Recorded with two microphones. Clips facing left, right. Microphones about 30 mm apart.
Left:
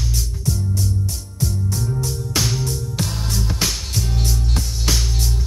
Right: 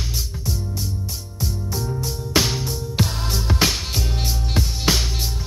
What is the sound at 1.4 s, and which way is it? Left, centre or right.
Music, centre.